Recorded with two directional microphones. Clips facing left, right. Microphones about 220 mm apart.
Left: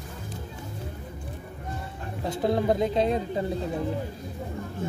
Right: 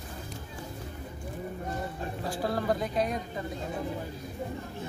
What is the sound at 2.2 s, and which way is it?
A woman's voice, 20° left (ahead or behind).